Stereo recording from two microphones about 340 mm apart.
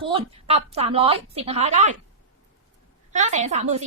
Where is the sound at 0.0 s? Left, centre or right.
Centre.